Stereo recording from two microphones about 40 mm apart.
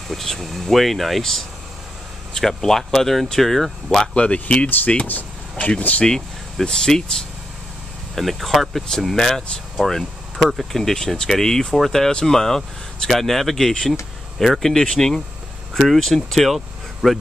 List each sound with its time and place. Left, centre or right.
0.1 s speech: centre
4.1 s speech: left
5.6 s speech: left
6.0 s speech: centre
8.2 s speech: centre
10.8 s speech: centre
16.4 s vehicle: centre